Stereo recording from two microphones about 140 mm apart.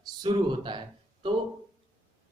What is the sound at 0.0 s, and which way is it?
Speech, 35° right (ahead or behind).